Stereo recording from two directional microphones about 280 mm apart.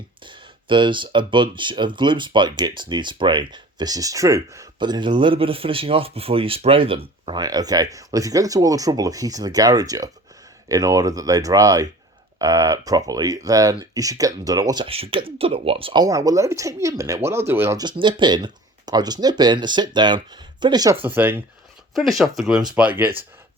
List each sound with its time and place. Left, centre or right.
0.2 s speech: centre